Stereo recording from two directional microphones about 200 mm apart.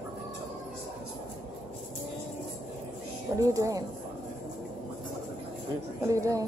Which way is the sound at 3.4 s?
15° right (ahead or behind).